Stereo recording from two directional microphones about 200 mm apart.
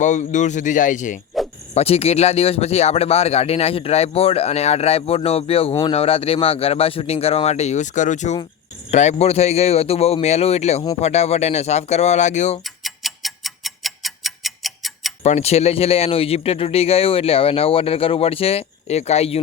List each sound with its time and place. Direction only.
0.0 s speech: 35° left (ahead or behind)
12.6 s tick-tock: centre (ahead or behind)
15.2 s speech: 35° left (ahead or behind)